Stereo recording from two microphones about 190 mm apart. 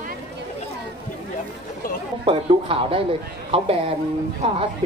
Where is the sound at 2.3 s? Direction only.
30° right (ahead or behind).